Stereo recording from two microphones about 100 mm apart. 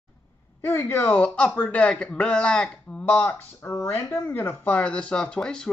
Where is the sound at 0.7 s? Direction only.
25° left (ahead or behind).